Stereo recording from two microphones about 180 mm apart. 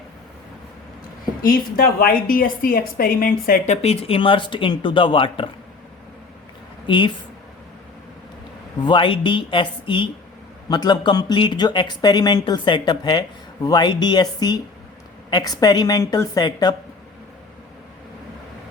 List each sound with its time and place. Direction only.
1.4 s a woman's voice: 55° left (ahead or behind)
3.8 s speech: 35° left (ahead or behind)
6.8 s speech: 25° left (ahead or behind)
8.8 s speech: 25° left (ahead or behind)